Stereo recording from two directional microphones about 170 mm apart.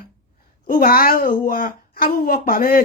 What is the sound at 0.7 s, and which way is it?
A woman's voice, 60° left (ahead or behind).